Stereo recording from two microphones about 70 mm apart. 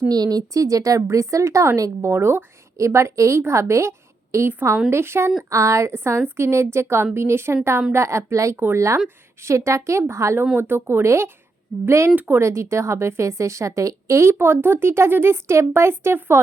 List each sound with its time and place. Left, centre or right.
0.1 s a woman's voice: right
8.5 s a woman's voice: right
9.4 s a woman's voice: right
12.1 s speech: right
12.4 s a woman's voice: right